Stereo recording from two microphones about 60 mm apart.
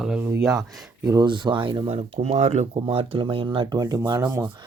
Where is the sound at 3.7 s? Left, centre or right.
Right.